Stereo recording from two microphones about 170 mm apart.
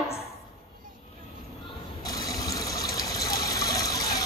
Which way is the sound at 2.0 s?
20° left (ahead or behind).